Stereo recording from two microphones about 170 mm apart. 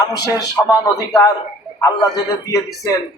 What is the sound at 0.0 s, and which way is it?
Speech, 20° left (ahead or behind).